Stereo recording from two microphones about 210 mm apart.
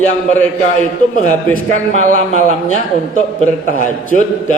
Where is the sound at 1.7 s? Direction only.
35° right (ahead or behind).